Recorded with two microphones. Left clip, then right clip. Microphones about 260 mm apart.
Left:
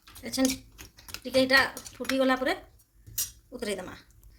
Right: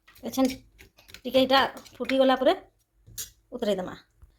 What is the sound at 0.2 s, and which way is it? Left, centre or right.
Speech, centre.